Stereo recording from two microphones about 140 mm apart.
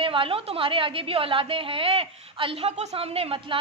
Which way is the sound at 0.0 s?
40° right (ahead or behind).